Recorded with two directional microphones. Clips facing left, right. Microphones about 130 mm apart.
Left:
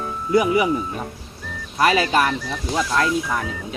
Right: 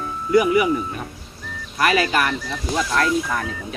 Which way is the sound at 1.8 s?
25° left (ahead or behind).